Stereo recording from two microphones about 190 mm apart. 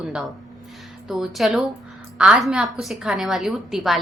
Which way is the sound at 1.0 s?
Centre (ahead or behind).